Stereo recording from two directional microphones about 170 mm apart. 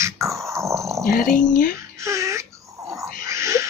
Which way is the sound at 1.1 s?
Centre (ahead or behind).